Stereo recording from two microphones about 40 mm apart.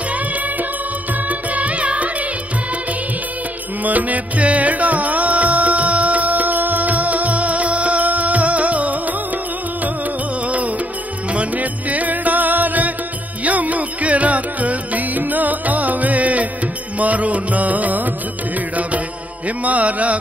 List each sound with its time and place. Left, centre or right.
1.3 s music: right
3.8 s music: right
10.4 s music: right
19.4 s mantra: right